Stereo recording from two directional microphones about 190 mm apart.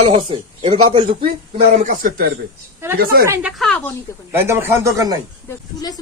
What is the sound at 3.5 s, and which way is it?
Speech, 5° left (ahead or behind).